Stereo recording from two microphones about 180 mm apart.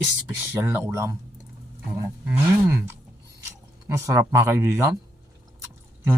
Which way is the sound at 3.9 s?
15° right (ahead or behind).